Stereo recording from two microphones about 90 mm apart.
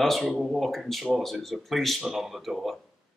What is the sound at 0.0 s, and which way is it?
Speech, centre (ahead or behind).